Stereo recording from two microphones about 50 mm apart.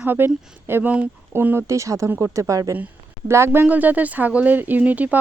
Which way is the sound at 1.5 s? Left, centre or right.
Right.